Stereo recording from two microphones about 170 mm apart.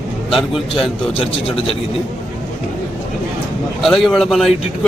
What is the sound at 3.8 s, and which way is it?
Speech, centre (ahead or behind).